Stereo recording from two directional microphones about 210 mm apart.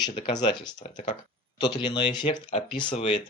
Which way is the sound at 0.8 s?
35° left (ahead or behind).